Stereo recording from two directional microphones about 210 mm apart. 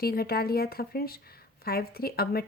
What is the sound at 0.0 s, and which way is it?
Speech, 45° left (ahead or behind).